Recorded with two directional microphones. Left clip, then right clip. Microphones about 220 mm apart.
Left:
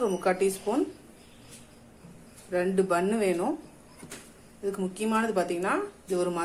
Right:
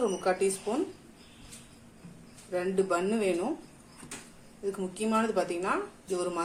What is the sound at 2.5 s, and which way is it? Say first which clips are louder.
Speech: left 3 dB; 15° left (ahead or behind).